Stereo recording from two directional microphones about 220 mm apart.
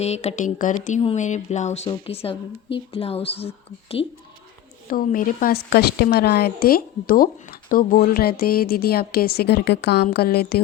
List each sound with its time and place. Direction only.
0.0 s speech: 30° left (ahead or behind)
4.9 s a woman's voice: 40° left (ahead or behind)